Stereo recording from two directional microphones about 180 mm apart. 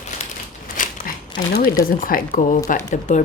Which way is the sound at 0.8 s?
45° left (ahead or behind).